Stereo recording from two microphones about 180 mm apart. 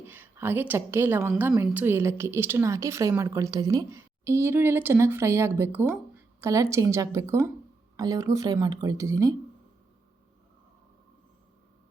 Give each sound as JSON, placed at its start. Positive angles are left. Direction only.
{"t": 0.0, "sound": "a woman's voice", "side_deg": -10}